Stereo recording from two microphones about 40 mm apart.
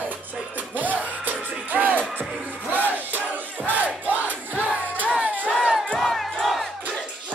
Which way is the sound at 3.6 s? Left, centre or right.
Right.